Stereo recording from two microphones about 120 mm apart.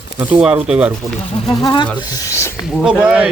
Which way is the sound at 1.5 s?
35° left (ahead or behind).